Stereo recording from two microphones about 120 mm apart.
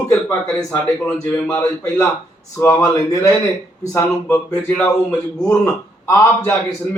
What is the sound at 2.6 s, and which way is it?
Speech, 25° left (ahead or behind).